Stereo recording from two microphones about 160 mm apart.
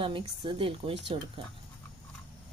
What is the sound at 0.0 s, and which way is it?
Speech, 35° right (ahead or behind).